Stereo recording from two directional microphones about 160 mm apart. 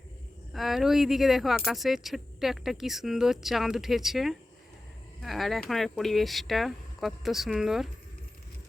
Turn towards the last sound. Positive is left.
turn(degrees=0)  # may be behind; listen again after turning